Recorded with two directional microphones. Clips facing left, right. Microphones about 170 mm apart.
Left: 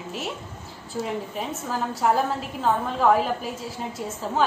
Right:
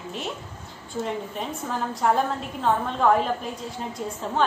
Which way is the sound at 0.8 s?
5° left (ahead or behind).